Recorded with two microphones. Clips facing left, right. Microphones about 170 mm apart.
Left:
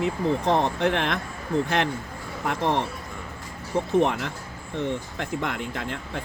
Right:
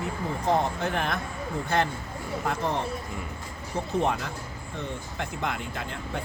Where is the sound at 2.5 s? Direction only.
70° left (ahead or behind).